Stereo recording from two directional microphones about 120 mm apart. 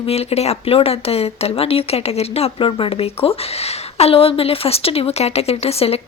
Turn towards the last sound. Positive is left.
turn(degrees=55)  # may be behind; listen again after turning